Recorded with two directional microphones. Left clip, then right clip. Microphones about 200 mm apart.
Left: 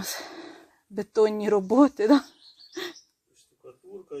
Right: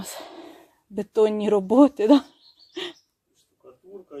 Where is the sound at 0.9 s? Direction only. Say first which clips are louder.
Right 2 dB; 10° right (ahead or behind).